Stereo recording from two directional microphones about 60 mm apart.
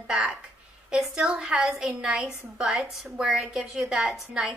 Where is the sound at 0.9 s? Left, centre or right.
Centre.